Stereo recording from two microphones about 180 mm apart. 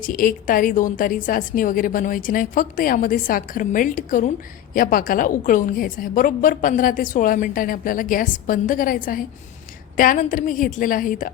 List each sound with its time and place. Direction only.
0.0 s a woman's voice: 50° left (ahead or behind)